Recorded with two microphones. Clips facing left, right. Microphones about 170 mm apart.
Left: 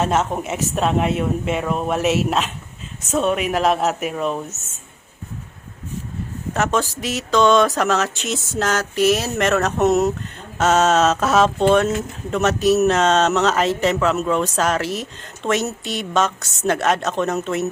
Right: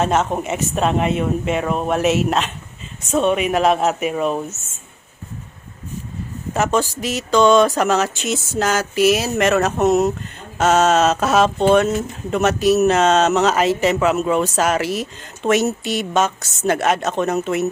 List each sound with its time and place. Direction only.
0.0 s speech: centre (ahead or behind)
6.5 s speech: centre (ahead or behind)